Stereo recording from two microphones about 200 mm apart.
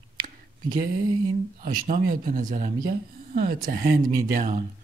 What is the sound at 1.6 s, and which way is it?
Speech, 45° right (ahead or behind).